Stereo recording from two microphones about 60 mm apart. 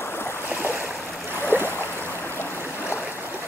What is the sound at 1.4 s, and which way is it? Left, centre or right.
Boat, right.